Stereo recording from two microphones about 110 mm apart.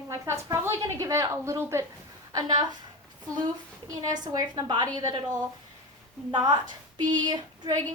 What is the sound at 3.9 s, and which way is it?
A woman's voice, 35° right (ahead or behind).